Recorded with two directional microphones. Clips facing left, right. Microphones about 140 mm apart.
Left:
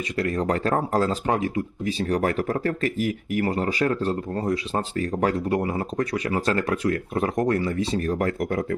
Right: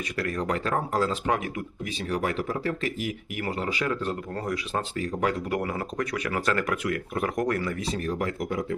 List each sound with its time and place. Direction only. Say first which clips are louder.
0.2 s speech: left 5 dB; 30° left (ahead or behind)
4.9 s speech: left 4 dB; 40° left (ahead or behind)
5.5 s speech: left 4 dB; 25° left (ahead or behind)
8.0 s speech: left 4 dB; 50° left (ahead or behind)